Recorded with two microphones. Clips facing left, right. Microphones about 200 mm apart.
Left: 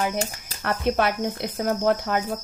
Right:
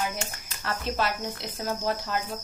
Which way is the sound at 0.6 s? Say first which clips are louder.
Left 6 dB; 60° left (ahead or behind).